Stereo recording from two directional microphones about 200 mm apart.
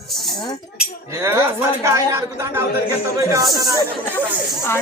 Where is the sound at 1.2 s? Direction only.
10° right (ahead or behind).